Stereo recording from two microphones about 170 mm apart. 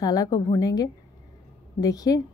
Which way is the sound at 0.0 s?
20° left (ahead or behind).